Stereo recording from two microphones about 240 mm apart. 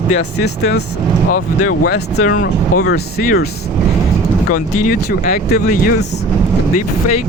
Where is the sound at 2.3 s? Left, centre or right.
Left.